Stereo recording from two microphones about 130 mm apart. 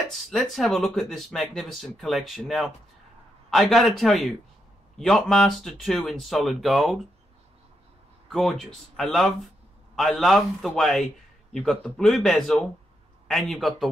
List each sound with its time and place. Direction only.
0.1 s speech: centre (ahead or behind)
8.3 s speech: centre (ahead or behind)